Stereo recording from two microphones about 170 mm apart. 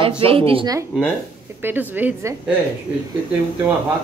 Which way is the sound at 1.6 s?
10° right (ahead or behind).